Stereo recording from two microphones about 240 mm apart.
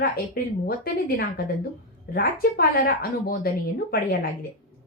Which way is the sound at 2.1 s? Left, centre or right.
Left.